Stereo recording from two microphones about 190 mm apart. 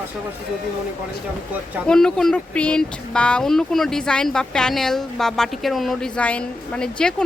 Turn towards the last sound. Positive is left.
turn(degrees=5)  # may be behind; listen again after turning